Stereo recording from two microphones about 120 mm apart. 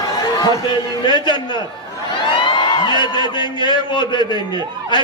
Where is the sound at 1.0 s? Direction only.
35° left (ahead or behind).